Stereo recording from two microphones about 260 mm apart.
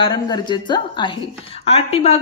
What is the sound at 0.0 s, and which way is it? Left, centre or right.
A woman's voice, centre.